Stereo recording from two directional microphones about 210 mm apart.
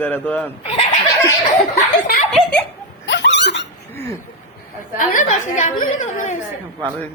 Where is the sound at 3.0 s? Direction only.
60° left (ahead or behind).